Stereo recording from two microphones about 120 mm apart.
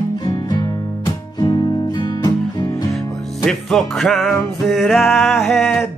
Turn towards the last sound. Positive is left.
turn(degrees=5)  # may be behind; listen again after turning